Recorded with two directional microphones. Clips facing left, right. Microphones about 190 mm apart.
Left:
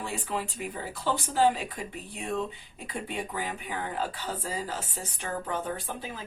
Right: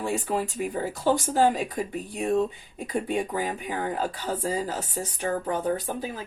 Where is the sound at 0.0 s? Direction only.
45° right (ahead or behind).